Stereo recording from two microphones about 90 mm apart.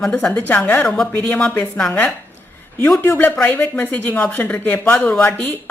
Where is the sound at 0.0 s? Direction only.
10° left (ahead or behind).